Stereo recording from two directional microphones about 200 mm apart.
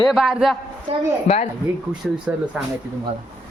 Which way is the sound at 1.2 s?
30° left (ahead or behind).